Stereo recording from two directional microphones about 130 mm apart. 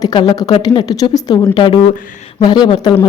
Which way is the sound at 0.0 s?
35° left (ahead or behind).